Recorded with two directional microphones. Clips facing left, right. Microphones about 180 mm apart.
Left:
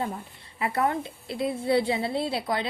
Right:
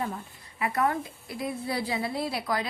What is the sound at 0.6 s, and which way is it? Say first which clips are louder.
A woman's voice: left 1 dB; 30° left (ahead or behind).